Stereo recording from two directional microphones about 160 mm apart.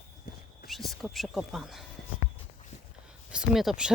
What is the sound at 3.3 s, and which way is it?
Speech, centre (ahead or behind).